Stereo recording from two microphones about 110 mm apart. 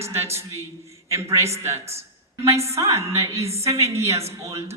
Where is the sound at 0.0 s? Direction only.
25° right (ahead or behind).